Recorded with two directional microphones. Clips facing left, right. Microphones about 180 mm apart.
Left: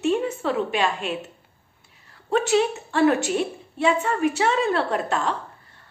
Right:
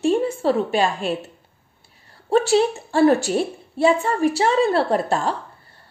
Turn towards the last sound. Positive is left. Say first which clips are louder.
# right 4 dB
turn(degrees=-35)  # may be behind; listen again after turning